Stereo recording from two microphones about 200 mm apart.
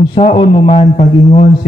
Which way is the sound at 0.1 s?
30° left (ahead or behind).